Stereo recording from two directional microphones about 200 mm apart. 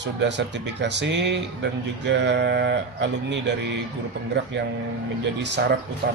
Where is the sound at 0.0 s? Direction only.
60° right (ahead or behind).